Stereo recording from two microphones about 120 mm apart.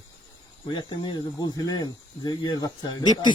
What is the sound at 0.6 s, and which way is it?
Speech, 40° left (ahead or behind).